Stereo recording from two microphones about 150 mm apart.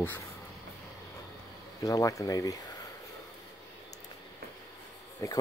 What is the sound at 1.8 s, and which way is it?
Speech, 20° left (ahead or behind).